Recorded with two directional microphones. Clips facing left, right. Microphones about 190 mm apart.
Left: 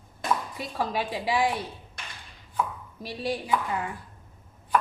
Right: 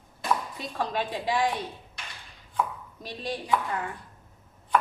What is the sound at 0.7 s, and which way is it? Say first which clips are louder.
Speech: left 1 dB; 10° left (ahead or behind).